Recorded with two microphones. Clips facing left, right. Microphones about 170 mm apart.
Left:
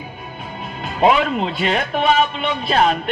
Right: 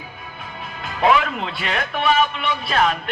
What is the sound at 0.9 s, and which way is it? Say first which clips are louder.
Speech: left 3 dB; 25° left (ahead or behind).